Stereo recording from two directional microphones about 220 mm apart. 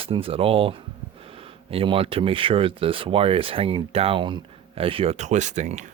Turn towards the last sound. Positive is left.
turn(degrees=-30)  # may be behind; listen again after turning